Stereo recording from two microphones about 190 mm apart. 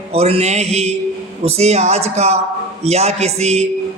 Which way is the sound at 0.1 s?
30° right (ahead or behind).